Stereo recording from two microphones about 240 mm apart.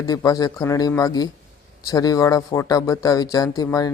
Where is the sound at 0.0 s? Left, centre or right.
Centre.